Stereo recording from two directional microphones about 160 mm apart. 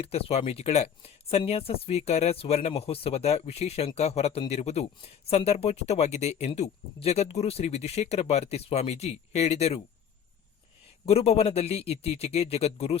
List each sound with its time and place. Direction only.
0.0 s speech: 40° left (ahead or behind)
11.0 s speech: 40° left (ahead or behind)